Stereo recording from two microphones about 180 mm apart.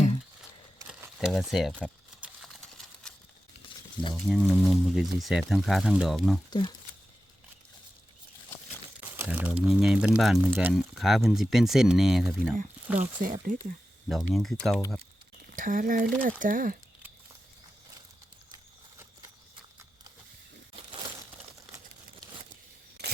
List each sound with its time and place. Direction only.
1.2 s a sound: centre (ahead or behind)
4.1 s speech: centre (ahead or behind)
6.5 s speech: 25° left (ahead or behind)
9.0 s speech: 10° right (ahead or behind)
13.0 s speech: 45° right (ahead or behind)
14.1 s speech: centre (ahead or behind)
14.8 s speech: 15° left (ahead or behind)
15.5 s speech: 50° right (ahead or behind)